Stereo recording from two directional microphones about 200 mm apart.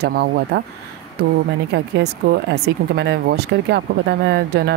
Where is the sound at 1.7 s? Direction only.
55° right (ahead or behind).